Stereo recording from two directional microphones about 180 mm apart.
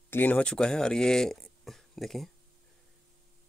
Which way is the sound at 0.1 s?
10° left (ahead or behind).